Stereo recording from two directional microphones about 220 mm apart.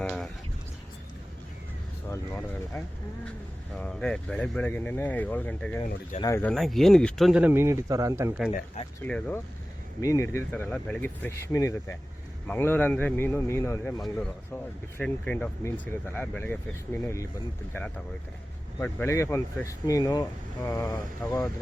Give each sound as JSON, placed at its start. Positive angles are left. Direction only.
{"t": 0.0, "sound": "a sound", "side_deg": 5}
{"t": 2.0, "sound": "speech", "side_deg": 10}
{"t": 3.8, "sound": "speech", "side_deg": 5}
{"t": 5.8, "sound": "speech", "side_deg": 25}
{"t": 6.5, "sound": "speech", "side_deg": 0}
{"t": 9.0, "sound": "speech", "side_deg": 5}